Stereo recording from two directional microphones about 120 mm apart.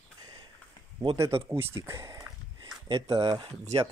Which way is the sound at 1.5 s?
20° right (ahead or behind).